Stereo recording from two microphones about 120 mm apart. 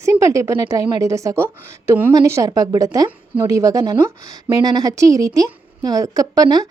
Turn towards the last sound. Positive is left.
turn(degrees=-35)  # may be behind; listen again after turning